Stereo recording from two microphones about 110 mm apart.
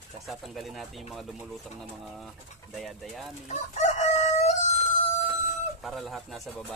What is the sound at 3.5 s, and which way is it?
Chicken, 90° left.